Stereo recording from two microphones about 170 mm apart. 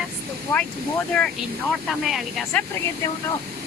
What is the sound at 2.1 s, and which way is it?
Speech, centre (ahead or behind).